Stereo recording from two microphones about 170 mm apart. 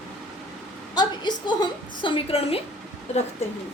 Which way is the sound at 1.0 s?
25° left (ahead or behind).